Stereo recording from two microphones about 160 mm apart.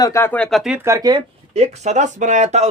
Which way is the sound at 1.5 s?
40° right (ahead or behind).